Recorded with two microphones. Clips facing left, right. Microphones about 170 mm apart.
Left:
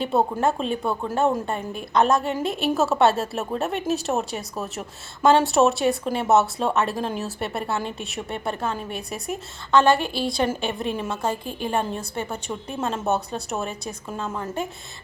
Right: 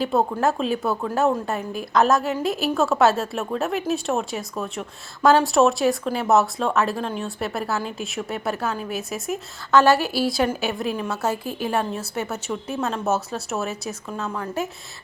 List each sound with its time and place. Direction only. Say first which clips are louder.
0.0 s a woman's voice: right 1 dB; centre (ahead or behind)